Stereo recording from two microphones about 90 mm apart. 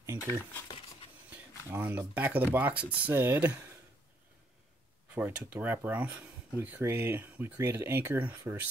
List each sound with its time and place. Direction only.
0.0 s crumpling: 30° right (ahead or behind)
1.7 s speech: 25° right (ahead or behind)
5.5 s speech: 25° right (ahead or behind)
6.8 s speech: 25° right (ahead or behind)